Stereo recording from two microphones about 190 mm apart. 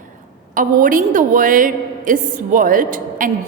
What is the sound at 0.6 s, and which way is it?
A woman's voice, 45° right (ahead or behind).